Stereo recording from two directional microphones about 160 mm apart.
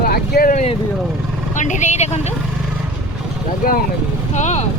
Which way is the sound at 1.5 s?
50° left (ahead or behind).